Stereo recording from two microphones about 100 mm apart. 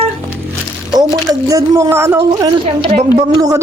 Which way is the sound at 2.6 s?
80° right.